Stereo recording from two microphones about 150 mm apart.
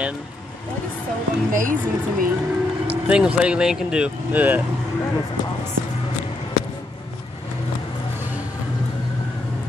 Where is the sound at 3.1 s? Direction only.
5° right (ahead or behind).